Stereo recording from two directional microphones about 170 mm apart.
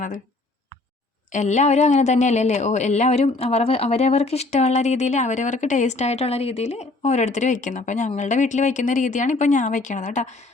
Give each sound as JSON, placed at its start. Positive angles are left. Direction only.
{"t": 1.3, "sound": "speech", "side_deg": 45}